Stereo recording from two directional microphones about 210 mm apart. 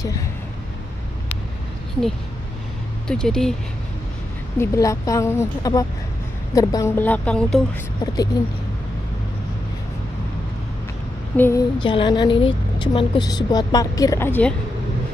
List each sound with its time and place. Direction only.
3.1 s speech: 5° left (ahead or behind)
4.6 s speech: 15° left (ahead or behind)
8.3 s speech: 20° left (ahead or behind)
11.3 s speech: 10° left (ahead or behind)
11.8 s a woman's voice: 25° left (ahead or behind)